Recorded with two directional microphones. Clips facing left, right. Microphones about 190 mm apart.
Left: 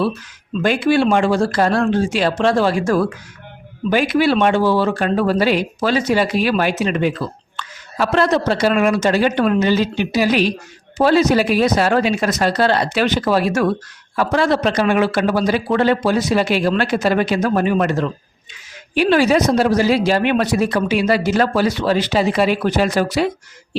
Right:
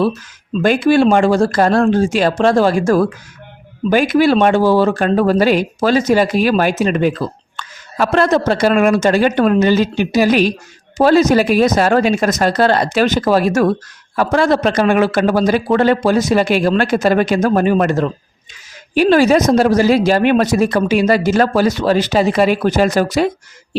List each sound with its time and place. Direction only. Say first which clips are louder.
0.6 s speech: right 4 dB; 45° right (ahead or behind)